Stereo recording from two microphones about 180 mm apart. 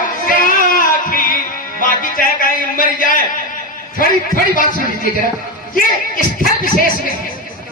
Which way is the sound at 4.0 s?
50° left (ahead or behind).